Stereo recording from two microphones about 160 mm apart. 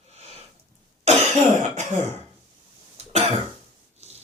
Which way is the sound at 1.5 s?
50° right (ahead or behind).